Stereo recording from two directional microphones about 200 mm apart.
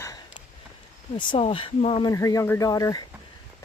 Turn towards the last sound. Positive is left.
turn(degrees=15)  # may be behind; listen again after turning